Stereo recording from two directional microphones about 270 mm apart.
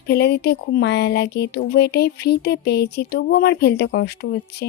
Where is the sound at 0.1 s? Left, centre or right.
Left.